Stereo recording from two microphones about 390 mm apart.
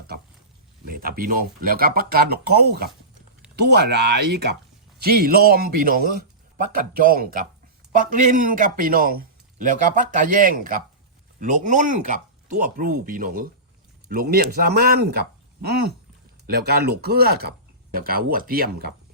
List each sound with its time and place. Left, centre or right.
0.9 s a man's voice: right